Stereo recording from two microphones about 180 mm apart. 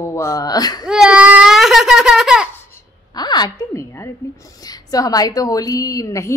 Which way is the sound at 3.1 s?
25° left (ahead or behind).